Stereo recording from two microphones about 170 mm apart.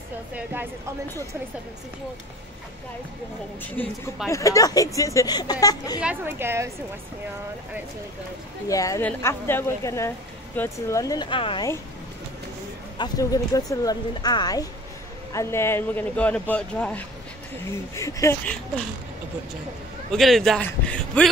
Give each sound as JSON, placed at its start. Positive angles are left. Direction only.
{"t": 0.3, "sound": "a woman's voice", "side_deg": -10}
{"t": 3.8, "sound": "a man's voice", "side_deg": 10}
{"t": 5.9, "sound": "a woman's voice", "side_deg": -10}
{"t": 8.6, "sound": "a woman's voice", "side_deg": 20}
{"t": 12.9, "sound": "a woman's voice", "side_deg": 25}
{"t": 20.1, "sound": "speech", "side_deg": 0}